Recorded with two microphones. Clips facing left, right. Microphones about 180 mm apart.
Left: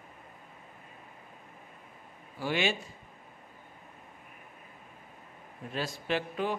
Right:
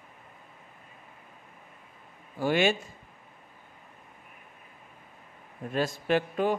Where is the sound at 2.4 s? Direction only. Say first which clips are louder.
Right 6 dB; 50° right (ahead or behind).